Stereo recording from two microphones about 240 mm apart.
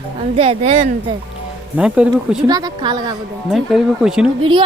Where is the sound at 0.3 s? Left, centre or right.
Right.